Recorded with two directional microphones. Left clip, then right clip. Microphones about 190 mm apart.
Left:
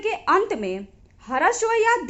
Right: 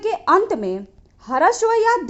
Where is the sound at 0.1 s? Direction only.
35° right (ahead or behind).